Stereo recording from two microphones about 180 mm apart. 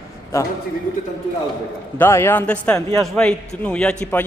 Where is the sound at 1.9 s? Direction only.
10° left (ahead or behind).